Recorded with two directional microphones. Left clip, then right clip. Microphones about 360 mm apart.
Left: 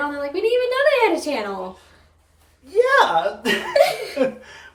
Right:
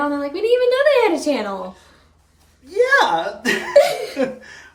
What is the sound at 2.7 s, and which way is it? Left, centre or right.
A woman's voice, centre.